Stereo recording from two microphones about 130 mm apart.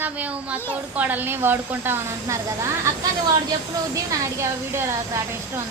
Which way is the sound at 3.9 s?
25° right (ahead or behind).